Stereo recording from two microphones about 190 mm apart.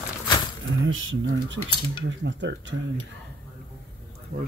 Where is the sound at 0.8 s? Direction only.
90° right.